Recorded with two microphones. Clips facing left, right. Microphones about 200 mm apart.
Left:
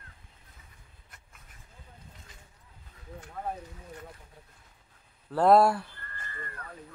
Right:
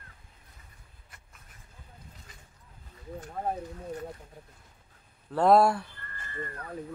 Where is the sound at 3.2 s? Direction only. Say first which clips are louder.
Right 4 dB; 40° right (ahead or behind).